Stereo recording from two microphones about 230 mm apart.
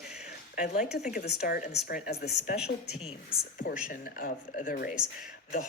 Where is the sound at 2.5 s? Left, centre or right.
Centre.